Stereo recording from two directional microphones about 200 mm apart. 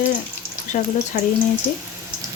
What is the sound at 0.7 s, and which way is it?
Speech, 40° left (ahead or behind).